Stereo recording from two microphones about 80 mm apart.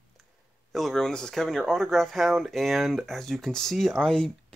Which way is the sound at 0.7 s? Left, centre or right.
Centre.